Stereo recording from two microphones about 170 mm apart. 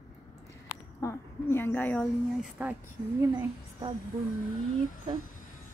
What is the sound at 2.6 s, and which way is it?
Speech, 10° right (ahead or behind).